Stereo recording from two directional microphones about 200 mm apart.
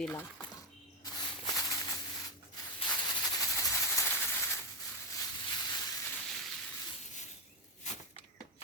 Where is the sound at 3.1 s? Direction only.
15° left (ahead or behind).